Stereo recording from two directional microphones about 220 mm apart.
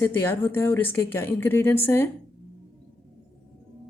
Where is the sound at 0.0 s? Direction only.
10° left (ahead or behind).